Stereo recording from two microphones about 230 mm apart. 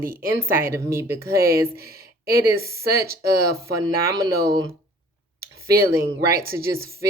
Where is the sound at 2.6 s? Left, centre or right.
Centre.